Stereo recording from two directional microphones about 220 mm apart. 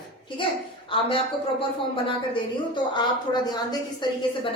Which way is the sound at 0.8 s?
25° left (ahead or behind).